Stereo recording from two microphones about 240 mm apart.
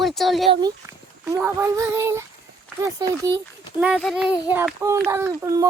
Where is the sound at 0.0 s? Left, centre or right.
Centre.